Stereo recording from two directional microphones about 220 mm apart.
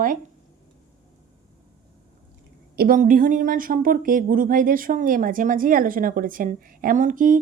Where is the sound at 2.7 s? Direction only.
40° right (ahead or behind).